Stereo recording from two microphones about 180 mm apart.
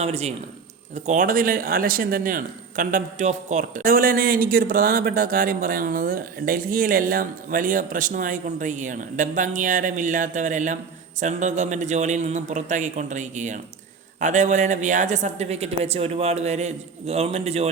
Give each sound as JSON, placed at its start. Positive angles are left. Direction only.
{"t": 0.0, "sound": "speech", "side_deg": -35}